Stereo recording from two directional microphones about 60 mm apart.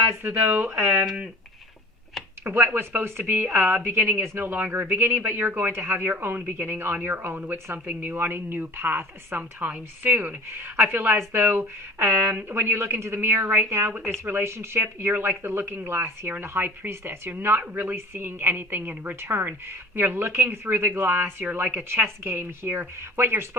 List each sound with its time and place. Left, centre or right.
0.2 s speech: right
2.4 s speech: right
12.0 s a man's voice: right